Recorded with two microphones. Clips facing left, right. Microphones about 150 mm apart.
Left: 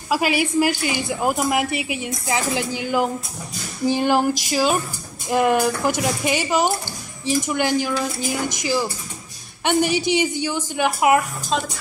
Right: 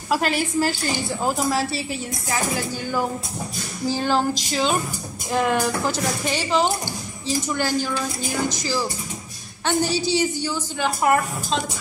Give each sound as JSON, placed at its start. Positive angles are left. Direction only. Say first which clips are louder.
{"t": 0.1, "sound": "a woman's voice", "louder": "left 2 dB", "side_deg": 10}